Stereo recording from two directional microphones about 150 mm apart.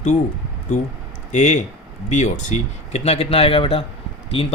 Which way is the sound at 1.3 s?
50° left (ahead or behind).